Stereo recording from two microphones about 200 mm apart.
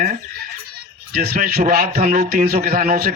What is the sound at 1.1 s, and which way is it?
Speech, 50° right (ahead or behind).